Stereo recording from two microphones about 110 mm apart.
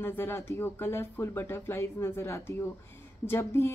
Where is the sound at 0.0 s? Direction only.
20° left (ahead or behind).